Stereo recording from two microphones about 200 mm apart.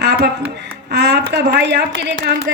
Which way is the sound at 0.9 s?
55° right (ahead or behind).